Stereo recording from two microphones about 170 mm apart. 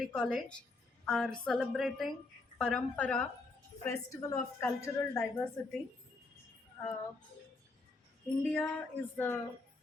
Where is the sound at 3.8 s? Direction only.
20° left (ahead or behind).